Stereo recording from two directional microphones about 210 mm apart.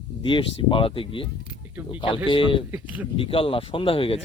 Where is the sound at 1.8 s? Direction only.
10° right (ahead or behind).